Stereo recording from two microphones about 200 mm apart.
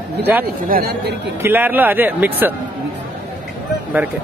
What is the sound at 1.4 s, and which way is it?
Speech, 10° right (ahead or behind).